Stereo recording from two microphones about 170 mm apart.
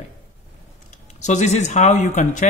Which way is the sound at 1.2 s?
45° left (ahead or behind).